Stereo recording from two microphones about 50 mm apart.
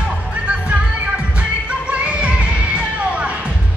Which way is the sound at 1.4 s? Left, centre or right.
Right.